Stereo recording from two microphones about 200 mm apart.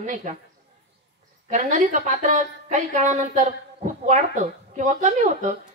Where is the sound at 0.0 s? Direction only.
40° right (ahead or behind).